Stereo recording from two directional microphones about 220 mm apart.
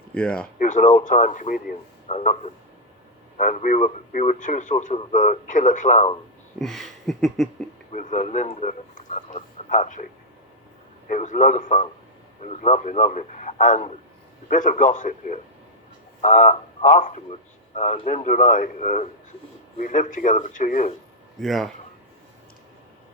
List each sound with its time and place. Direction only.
0.1 s speech: 5° left (ahead or behind)
0.6 s a man's voice: 35° left (ahead or behind)
6.6 s a sound: centre (ahead or behind)
7.9 s a man's voice: 35° left (ahead or behind)
11.1 s a man's voice: 35° left (ahead or behind)
21.4 s a sound: centre (ahead or behind)